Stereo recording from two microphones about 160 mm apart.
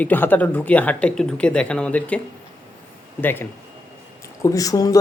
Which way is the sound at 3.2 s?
15° left (ahead or behind).